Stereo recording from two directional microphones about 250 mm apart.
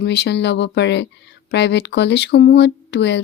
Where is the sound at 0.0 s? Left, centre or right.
Left.